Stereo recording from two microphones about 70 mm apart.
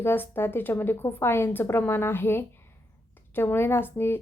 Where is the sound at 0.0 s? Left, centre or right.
Left.